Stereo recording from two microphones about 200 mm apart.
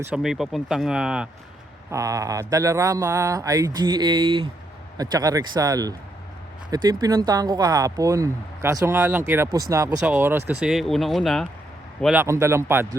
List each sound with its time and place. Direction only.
0.0 s speech: 5° right (ahead or behind)
1.9 s speech: 15° right (ahead or behind); by 11.4 s centre (ahead or behind)
12.0 s speech: 10° right (ahead or behind)